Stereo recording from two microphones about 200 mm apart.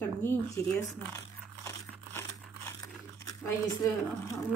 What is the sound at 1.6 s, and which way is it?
Crumpling, 15° left (ahead or behind).